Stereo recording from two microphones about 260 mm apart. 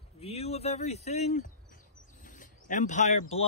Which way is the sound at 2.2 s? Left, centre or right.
Left.